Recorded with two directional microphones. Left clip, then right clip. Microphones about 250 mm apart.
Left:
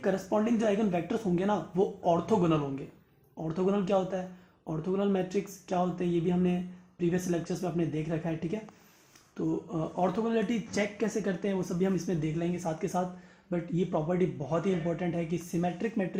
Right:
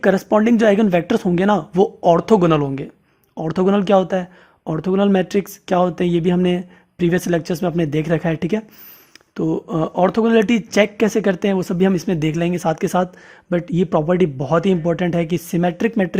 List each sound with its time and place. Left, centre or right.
0.0 s speech: right